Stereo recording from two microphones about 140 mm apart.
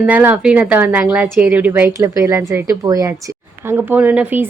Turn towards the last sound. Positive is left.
turn(degrees=-10)  # may be behind; listen again after turning